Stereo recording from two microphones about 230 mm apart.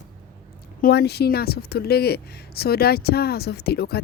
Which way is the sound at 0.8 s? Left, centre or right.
Left.